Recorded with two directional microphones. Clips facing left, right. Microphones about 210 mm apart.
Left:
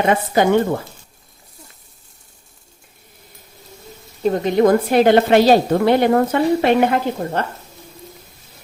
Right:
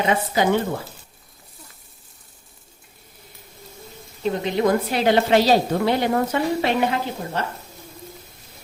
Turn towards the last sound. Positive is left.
turn(degrees=50)  # may be behind; listen again after turning